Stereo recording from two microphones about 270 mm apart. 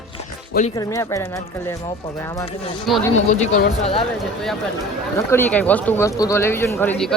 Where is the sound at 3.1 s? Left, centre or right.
Left.